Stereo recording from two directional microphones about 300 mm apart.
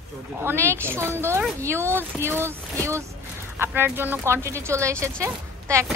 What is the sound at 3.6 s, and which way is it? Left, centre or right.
Speech, centre.